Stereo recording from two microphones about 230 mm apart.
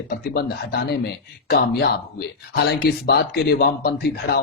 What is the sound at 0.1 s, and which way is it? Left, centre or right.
A man's voice, left.